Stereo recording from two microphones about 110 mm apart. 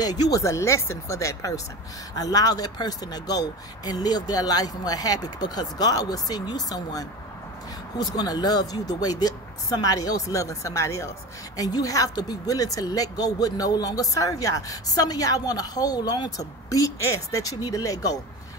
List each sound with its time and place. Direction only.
0.0 s speech: 35° left (ahead or behind)